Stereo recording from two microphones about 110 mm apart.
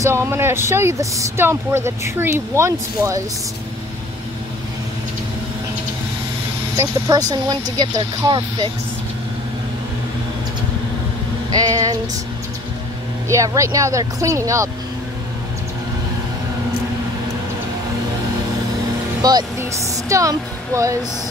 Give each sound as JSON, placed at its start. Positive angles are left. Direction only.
{"t": 0.0, "sound": "speech", "side_deg": -25}
{"t": 6.8, "sound": "speech", "side_deg": -30}
{"t": 11.5, "sound": "speech", "side_deg": -30}
{"t": 13.3, "sound": "speech", "side_deg": -30}
{"t": 19.2, "sound": "speech", "side_deg": -40}
{"t": 19.6, "sound": "speech", "side_deg": -30}